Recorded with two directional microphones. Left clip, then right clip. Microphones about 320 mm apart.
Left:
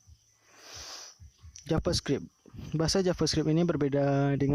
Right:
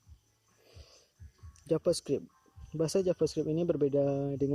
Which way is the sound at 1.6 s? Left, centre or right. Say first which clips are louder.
Right 1 dB; left.